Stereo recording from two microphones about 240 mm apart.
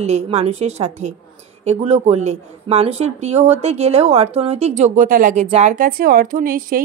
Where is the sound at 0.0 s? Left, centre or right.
Right.